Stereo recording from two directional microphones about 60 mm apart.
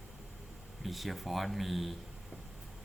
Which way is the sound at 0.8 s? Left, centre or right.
Centre.